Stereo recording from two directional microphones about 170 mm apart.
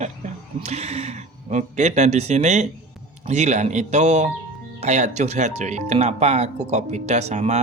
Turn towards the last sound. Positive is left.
turn(degrees=-40)  # may be behind; listen again after turning